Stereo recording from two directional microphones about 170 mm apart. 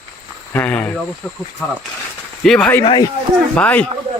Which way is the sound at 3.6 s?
10° left (ahead or behind).